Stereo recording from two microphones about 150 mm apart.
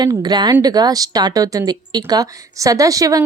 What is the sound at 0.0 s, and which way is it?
Speech, 30° right (ahead or behind).